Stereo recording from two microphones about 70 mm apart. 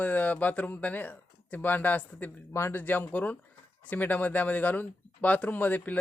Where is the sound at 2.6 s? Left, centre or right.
Left.